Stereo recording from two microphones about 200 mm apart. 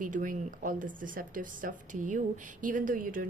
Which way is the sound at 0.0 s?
40° right (ahead or behind).